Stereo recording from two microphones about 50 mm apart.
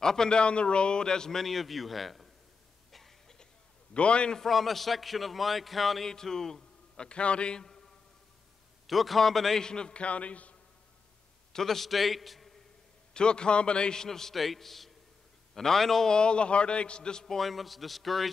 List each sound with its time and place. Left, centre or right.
0.0 s a man's voice: centre
2.9 s a sound: centre
3.9 s a man's voice: left
4.4 s a man's voice: centre
6.0 s a man's voice: centre
8.8 s a man's voice: centre; by 10.5 s left
11.5 s a man's voice: centre
13.1 s a man's voice: centre
17.4 s a man's voice: centre